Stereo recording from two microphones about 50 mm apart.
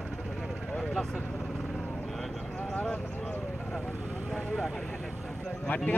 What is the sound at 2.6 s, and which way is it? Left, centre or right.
Vehicle, left.